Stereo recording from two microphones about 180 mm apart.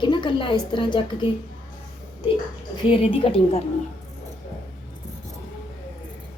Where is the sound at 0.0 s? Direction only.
25° left (ahead or behind).